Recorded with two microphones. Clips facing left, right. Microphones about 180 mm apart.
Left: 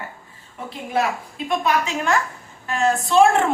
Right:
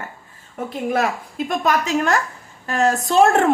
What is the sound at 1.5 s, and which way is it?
A woman's voice, 40° right (ahead or behind).